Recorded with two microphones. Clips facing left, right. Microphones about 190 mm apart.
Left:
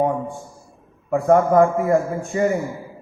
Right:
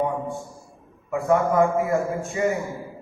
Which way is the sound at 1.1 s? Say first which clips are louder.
Left 5 dB; 50° left (ahead or behind).